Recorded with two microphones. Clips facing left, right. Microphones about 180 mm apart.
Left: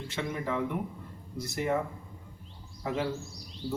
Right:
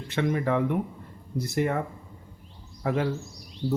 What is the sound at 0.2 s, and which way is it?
Speech, 60° right (ahead or behind).